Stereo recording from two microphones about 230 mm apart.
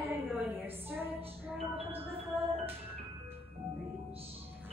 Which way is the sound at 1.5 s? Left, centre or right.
Right.